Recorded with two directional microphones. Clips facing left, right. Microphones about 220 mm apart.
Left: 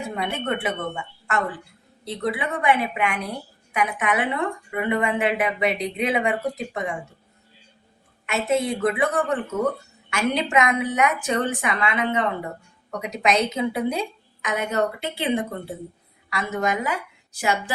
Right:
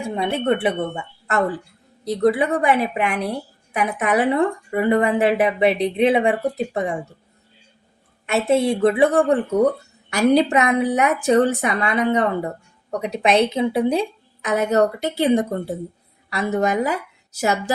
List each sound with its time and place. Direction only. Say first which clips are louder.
0.3 s a woman's voice: right 9 dB; 35° right (ahead or behind)
8.3 s a woman's voice: right 5 dB; 30° right (ahead or behind)